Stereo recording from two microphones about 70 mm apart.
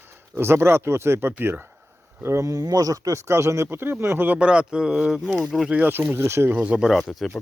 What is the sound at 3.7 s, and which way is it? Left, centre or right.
Speech, right.